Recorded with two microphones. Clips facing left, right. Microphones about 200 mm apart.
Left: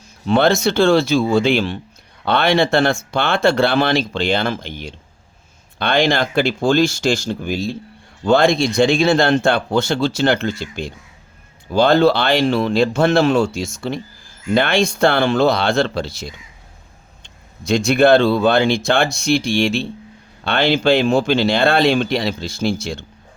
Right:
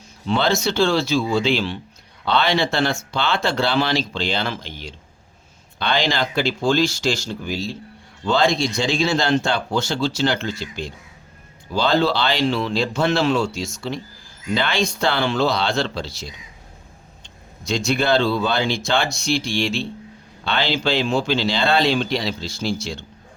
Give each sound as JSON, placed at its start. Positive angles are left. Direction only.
{"t": 0.3, "sound": "speech", "side_deg": 55}
{"t": 17.7, "sound": "speech", "side_deg": 55}